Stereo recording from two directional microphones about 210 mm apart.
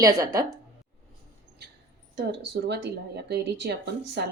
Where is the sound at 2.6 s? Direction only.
50° right (ahead or behind).